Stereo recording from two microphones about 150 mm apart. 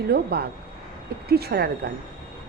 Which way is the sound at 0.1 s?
90° right.